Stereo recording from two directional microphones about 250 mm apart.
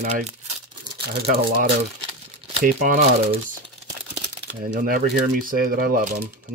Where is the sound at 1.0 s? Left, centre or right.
Right.